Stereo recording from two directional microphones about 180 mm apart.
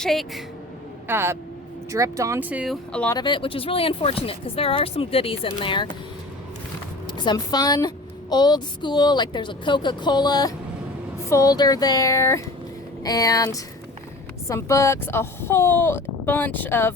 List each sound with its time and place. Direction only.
0.0 s speech: centre (ahead or behind)
1.0 s speech: 10° right (ahead or behind)
2.9 s speech: 5° left (ahead or behind)
3.2 s speech: 25° left (ahead or behind)
7.1 s a woman's voice: 25° left (ahead or behind)